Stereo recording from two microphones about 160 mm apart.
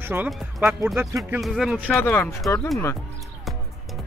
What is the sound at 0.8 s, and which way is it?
Speech, 15° right (ahead or behind).